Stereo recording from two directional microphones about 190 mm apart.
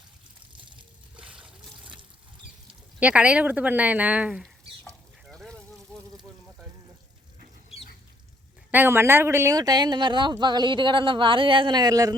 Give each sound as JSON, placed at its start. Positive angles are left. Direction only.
{"t": 3.0, "sound": "speech", "side_deg": -5}
{"t": 4.8, "sound": "stir", "side_deg": 5}
{"t": 8.7, "sound": "speech", "side_deg": -10}